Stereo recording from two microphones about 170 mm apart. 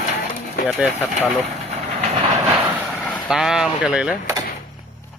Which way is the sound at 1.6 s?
40° right (ahead or behind).